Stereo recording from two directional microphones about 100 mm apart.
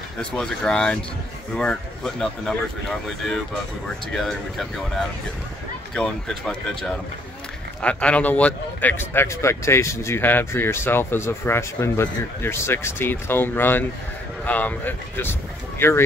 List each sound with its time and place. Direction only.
0.2 s speech: 10° left (ahead or behind)
4.1 s speech: 5° left (ahead or behind); by 16.0 s 20° left (ahead or behind)